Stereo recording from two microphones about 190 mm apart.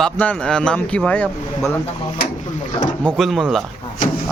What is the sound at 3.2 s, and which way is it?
Speech, centre (ahead or behind).